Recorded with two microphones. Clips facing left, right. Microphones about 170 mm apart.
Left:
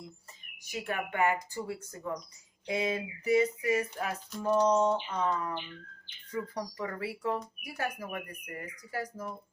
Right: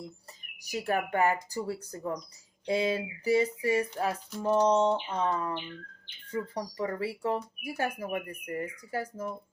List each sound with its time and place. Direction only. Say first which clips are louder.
0.6 s speech: right 5 dB; 35° right (ahead or behind)